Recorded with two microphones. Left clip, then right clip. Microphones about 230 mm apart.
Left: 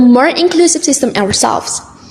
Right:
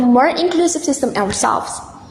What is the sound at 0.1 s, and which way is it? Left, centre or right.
A woman's voice, left.